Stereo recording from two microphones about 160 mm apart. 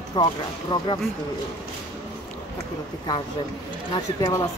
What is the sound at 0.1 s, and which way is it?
Speech, 25° left (ahead or behind).